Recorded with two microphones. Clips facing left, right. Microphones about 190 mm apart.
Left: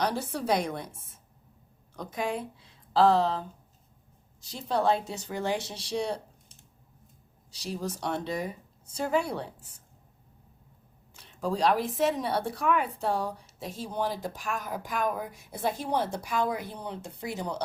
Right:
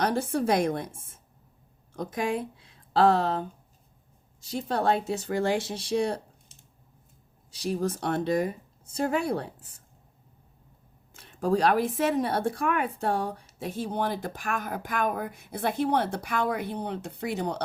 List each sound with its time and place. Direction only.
0.0 s a woman's voice: 50° right (ahead or behind)
4.5 s a woman's voice: 55° right (ahead or behind)
7.5 s a woman's voice: 55° right (ahead or behind)
11.1 s speech: 55° right (ahead or behind)